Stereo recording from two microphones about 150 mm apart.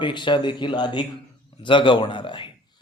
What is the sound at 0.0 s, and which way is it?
A man's voice, 30° left (ahead or behind).